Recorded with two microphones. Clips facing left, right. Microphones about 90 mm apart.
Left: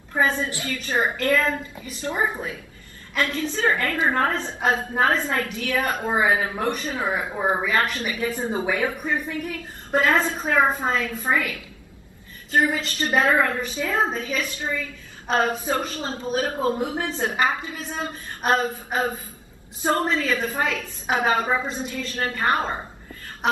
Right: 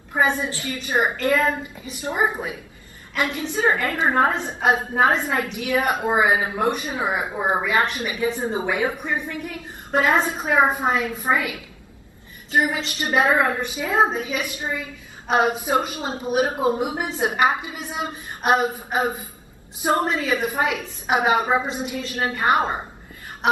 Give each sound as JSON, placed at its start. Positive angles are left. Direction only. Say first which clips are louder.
{"t": 0.1, "sound": "a woman's voice", "louder": "right 1 dB", "side_deg": -15}